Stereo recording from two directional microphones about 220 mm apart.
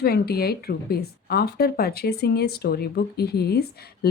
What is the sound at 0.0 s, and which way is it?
Speech, 45° left (ahead or behind).